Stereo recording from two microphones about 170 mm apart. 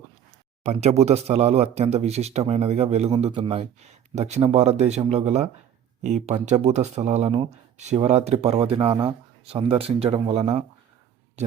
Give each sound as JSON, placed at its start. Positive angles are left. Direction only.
{"t": 0.6, "sound": "speech", "side_deg": -40}